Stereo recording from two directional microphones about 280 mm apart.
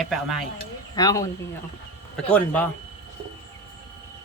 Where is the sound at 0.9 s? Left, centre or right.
Centre.